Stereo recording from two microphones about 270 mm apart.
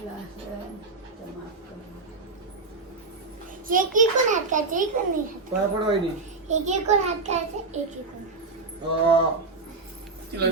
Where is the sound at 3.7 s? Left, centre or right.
Right.